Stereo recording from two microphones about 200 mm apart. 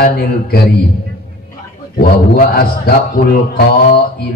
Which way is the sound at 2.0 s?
45° left (ahead or behind).